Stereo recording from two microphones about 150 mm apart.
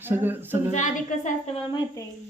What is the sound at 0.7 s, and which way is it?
Speech, 55° left (ahead or behind).